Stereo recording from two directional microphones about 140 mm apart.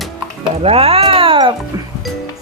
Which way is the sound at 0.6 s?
45° right (ahead or behind).